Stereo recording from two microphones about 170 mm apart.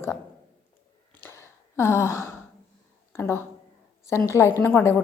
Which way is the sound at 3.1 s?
15° left (ahead or behind).